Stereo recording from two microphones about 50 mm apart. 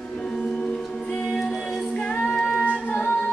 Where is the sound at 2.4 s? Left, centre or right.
Left.